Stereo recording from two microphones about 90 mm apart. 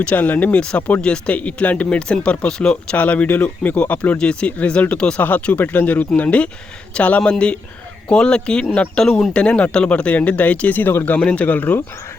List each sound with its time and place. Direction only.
0.0 s speech: 20° left (ahead or behind)